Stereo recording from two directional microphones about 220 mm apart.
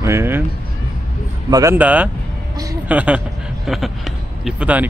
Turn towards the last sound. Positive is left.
turn(degrees=-5)  # may be behind; listen again after turning